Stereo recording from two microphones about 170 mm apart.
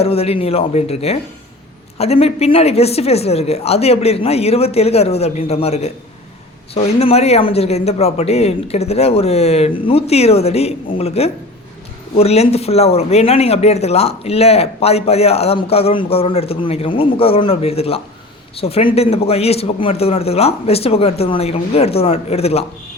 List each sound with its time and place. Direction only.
0.0 s speech: 35° left (ahead or behind)